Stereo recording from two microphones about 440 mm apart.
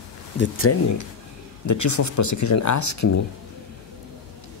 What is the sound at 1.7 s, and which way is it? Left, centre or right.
Speech, left.